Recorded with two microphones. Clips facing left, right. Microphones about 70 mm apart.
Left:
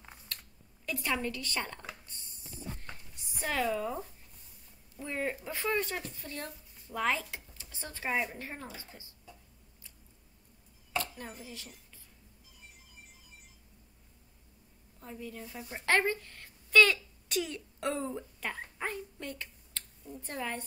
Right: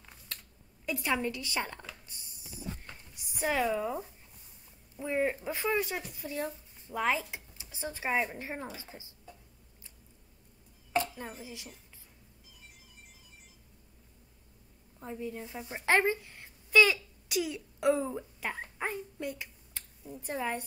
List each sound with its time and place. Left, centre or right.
0.8 s a woman's voice: centre
2.0 s a sound: centre
3.2 s a woman's voice: centre
5.7 s speech: centre
11.3 s a woman's voice: centre
15.0 s a woman's voice: right
16.8 s a sound: centre
20.2 s a woman's voice: centre